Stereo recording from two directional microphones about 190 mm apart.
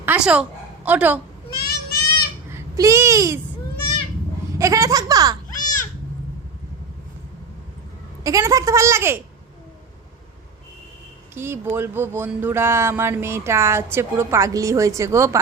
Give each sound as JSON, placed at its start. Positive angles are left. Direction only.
{"t": 0.0, "sound": "a woman's voice", "side_deg": -10}
{"t": 1.5, "sound": "a sound", "side_deg": 55}
{"t": 2.5, "sound": "a child's voice", "side_deg": -15}
{"t": 4.5, "sound": "a sound", "side_deg": -15}
{"t": 5.5, "sound": "baby cry", "side_deg": 45}
{"t": 8.2, "sound": "speech", "side_deg": -15}
{"t": 11.3, "sound": "speech", "side_deg": -10}